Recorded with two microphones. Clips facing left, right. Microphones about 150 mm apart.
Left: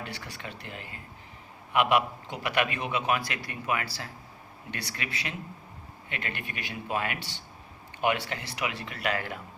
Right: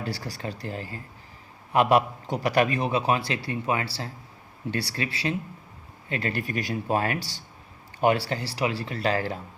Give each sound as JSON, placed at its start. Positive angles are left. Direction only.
{"t": 0.0, "sound": "a man's voice", "side_deg": -35}